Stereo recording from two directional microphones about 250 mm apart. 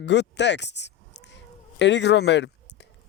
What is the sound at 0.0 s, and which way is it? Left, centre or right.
Speech, left.